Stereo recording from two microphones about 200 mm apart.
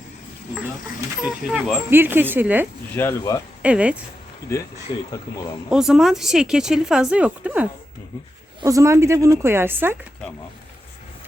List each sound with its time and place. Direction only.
1.2 s a woman's voice: 5° right (ahead or behind)
2.9 s speech: 10° left (ahead or behind)
3.6 s a woman's voice: 5° right (ahead or behind)
4.9 s speech: 20° left (ahead or behind)
5.7 s a woman's voice: 5° right (ahead or behind)